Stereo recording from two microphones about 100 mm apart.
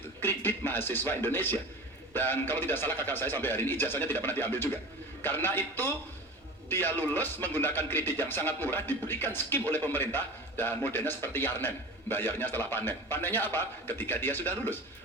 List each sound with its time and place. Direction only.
0.2 s speech: 20° left (ahead or behind)